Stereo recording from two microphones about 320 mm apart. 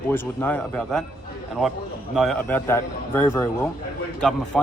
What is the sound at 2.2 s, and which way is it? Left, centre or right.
Speech, centre.